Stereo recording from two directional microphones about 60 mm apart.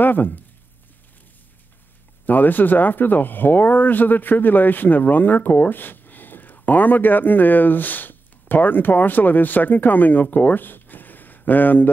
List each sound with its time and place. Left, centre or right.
0.0 s speech: left
2.2 s speech: left
10.3 s a sound: left